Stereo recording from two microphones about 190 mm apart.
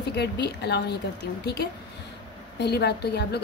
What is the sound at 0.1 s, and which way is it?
A woman's voice, 60° left (ahead or behind).